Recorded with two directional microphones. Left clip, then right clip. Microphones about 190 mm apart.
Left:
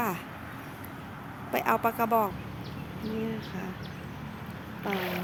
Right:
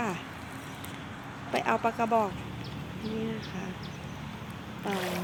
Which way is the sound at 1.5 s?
5° left (ahead or behind).